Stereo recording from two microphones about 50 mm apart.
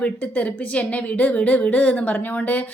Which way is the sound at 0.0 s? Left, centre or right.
Left.